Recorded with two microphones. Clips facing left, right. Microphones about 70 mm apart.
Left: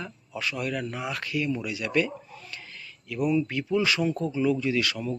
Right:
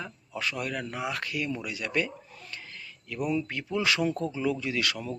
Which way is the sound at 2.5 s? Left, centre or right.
Right.